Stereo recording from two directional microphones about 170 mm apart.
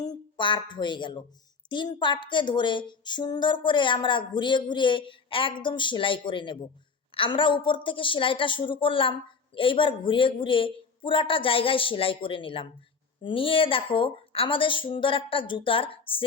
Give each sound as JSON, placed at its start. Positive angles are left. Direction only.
{"t": 0.0, "sound": "a woman's voice", "side_deg": 25}